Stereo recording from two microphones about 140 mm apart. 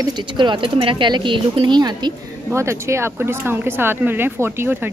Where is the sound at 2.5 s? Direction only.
20° right (ahead or behind).